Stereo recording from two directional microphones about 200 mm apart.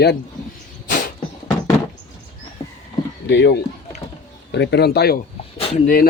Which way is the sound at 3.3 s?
60° left (ahead or behind).